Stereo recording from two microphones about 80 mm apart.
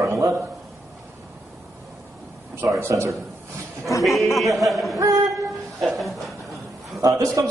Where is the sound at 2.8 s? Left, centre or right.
Right.